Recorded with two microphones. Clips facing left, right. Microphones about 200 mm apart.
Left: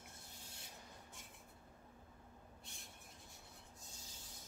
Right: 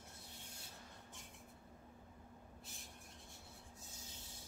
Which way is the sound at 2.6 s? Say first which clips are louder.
Right 2 dB; centre (ahead or behind).